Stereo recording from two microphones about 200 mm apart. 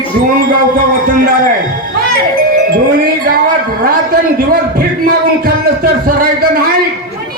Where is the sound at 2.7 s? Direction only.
45° right (ahead or behind).